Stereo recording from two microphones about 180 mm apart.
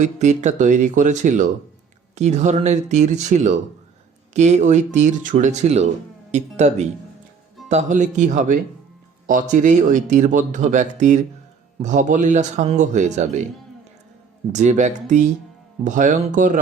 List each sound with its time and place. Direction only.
0.0 s speech: 40° right (ahead or behind)
14.5 s speech: 40° right (ahead or behind)